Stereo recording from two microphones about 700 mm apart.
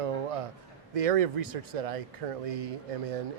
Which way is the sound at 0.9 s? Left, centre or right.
Right.